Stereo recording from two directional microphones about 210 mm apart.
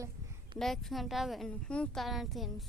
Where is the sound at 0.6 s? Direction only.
Centre (ahead or behind).